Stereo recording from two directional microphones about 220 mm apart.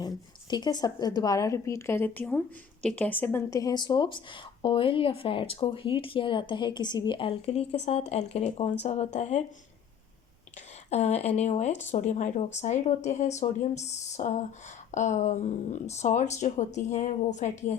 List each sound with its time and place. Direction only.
0.5 s a woman's voice: 20° left (ahead or behind)
10.8 s speech: 30° left (ahead or behind)